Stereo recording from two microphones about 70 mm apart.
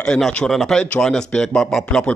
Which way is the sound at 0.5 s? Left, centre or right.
Centre.